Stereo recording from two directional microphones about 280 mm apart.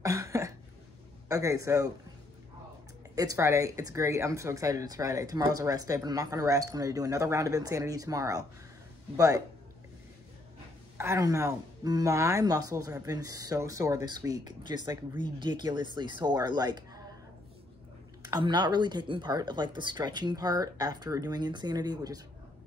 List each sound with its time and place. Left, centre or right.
0.0 s cough: centre
1.3 s speech: centre
3.2 s speech: centre
11.0 s speech: centre
18.3 s speech: centre